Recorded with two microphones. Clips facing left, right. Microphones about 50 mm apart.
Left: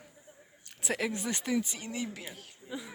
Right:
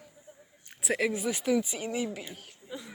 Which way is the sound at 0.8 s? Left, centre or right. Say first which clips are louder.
Right 4 dB; centre.